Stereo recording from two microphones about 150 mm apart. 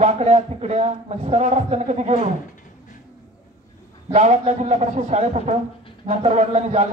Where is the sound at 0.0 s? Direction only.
45° right (ahead or behind).